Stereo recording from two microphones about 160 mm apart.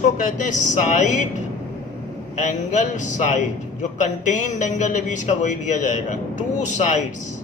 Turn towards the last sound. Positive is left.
turn(degrees=50)  # may be behind; listen again after turning